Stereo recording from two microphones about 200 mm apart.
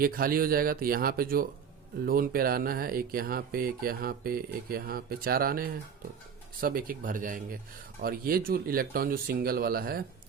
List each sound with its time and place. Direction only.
0.0 s speech: 45° right (ahead or behind)